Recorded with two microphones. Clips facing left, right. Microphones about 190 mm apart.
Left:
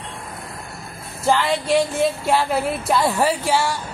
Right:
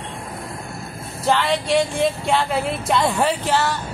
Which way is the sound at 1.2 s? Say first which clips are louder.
Even; 5° left (ahead or behind).